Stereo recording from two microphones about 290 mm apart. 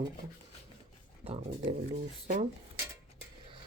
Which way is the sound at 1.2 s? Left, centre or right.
Right.